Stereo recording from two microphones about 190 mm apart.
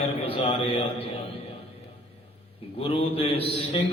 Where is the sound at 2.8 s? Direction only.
30° left (ahead or behind).